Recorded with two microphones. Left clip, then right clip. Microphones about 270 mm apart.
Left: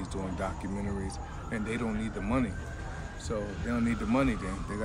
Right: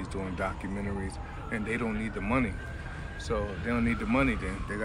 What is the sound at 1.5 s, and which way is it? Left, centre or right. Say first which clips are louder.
Speech: right 2 dB; centre.